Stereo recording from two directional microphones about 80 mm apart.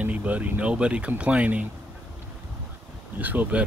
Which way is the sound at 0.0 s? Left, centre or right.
Centre.